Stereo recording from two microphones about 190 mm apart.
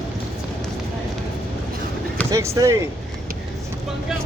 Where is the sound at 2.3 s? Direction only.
15° right (ahead or behind).